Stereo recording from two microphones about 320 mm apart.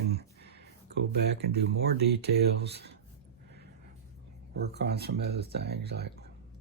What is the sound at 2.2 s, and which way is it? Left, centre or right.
Speech, right.